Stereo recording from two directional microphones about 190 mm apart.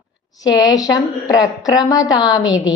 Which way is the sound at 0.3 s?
20° left (ahead or behind).